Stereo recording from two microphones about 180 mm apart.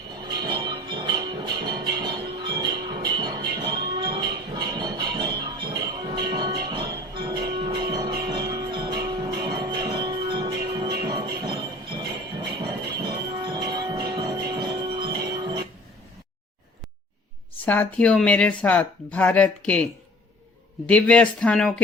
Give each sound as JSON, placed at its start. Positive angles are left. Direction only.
{"t": 0.2, "sound": "music", "side_deg": -25}
{"t": 17.7, "sound": "speech", "side_deg": 10}